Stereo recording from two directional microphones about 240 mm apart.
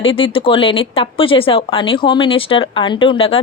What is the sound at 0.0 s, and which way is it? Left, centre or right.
Speech, left.